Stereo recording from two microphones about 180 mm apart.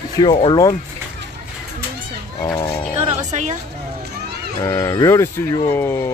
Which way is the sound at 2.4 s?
15° left (ahead or behind).